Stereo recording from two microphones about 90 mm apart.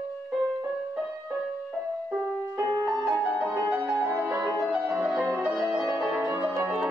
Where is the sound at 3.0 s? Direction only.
15° right (ahead or behind).